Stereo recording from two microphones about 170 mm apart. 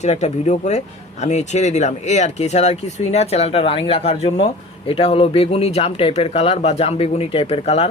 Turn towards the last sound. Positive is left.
turn(degrees=35)  # may be behind; listen again after turning